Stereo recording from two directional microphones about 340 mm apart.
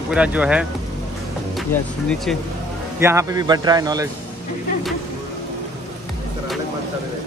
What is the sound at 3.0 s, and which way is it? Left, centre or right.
Speech, centre.